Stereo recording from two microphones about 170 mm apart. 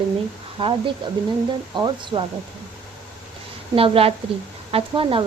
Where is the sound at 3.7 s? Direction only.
35° right (ahead or behind).